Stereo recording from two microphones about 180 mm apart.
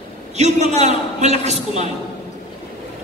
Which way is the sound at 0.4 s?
40° right (ahead or behind).